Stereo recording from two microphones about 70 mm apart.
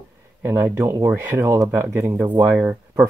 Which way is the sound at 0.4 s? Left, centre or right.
Right.